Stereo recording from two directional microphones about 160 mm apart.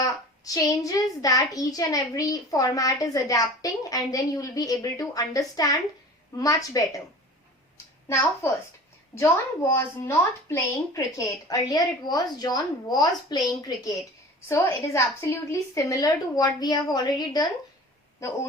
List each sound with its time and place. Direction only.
0.0 s a child's voice: 20° left (ahead or behind)
9.1 s a child's voice: 15° left (ahead or behind)